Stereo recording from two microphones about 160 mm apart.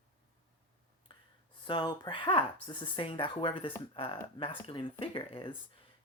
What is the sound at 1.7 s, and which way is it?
Speech, 30° left (ahead or behind).